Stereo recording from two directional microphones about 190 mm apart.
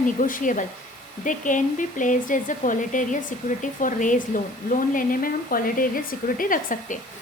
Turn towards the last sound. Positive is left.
turn(degrees=45)  # may be behind; listen again after turning